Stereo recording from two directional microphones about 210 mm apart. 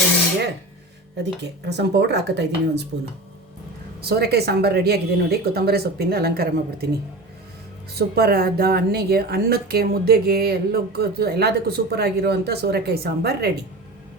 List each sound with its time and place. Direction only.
1.2 s speech: 55° right (ahead or behind)
4.0 s speech: 50° right (ahead or behind)
7.9 s speech: 50° right (ahead or behind)